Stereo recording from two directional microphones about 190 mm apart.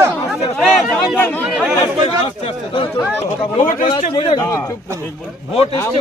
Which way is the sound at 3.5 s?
45° left (ahead or behind).